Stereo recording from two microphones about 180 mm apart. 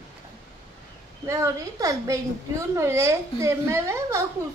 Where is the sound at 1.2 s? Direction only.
15° right (ahead or behind).